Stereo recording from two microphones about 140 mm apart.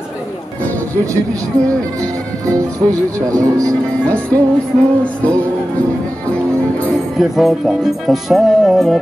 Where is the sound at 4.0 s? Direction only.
10° left (ahead or behind).